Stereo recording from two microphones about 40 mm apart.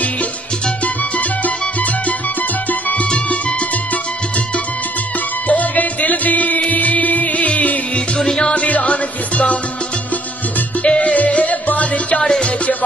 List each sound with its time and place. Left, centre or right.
5.5 s music: left
8.2 s music: centre
8.5 s music: left
10.8 s music: left
12.2 s music: centre